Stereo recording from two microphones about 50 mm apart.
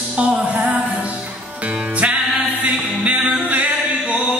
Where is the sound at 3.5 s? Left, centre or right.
Right.